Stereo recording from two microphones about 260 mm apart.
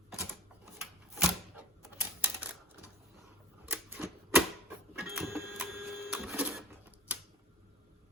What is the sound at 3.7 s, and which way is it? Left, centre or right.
Typewriter, centre.